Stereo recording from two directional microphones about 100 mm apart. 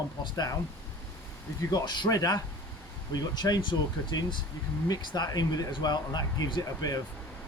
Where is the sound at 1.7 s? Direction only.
45° left (ahead or behind).